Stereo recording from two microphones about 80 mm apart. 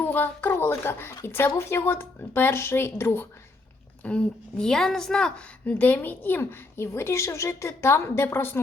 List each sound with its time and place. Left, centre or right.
0.0 s a woman's voice: left
4.0 s a woman's voice: centre
5.6 s a woman's voice: centre